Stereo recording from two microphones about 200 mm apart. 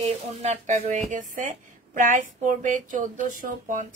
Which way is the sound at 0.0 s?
35° right (ahead or behind).